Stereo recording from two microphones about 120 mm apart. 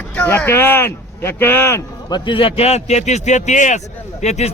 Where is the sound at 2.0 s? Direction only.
40° left (ahead or behind); by 3.8 s 90° left.